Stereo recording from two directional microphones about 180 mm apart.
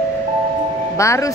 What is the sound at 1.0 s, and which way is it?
Speech, 15° left (ahead or behind).